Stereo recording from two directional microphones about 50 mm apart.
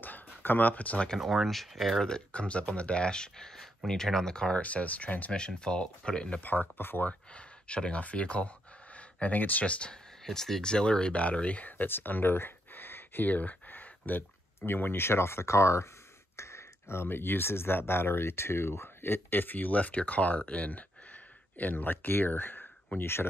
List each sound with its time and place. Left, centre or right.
0.0 s a sound: left
1.1 s speech: centre
2.0 s speech: centre
4.6 s speech: left
5.3 s speech: centre
6.4 s speech: left
7.1 s speech: left
10.2 s speech: centre; by 23.2 s left